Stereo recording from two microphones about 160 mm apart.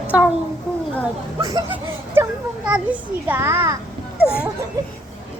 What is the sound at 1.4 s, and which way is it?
Speech, 20° right (ahead or behind).